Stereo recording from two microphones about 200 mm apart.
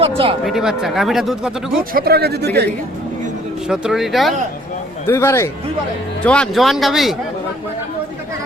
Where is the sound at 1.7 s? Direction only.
50° right (ahead or behind).